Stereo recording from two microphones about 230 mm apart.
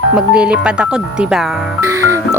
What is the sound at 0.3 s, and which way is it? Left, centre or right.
Speech, centre.